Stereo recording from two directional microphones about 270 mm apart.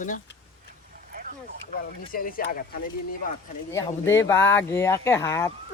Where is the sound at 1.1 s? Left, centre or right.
Right.